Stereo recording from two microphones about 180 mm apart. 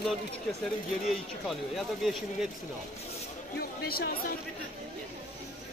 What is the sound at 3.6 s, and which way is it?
Speech, 55° left (ahead or behind).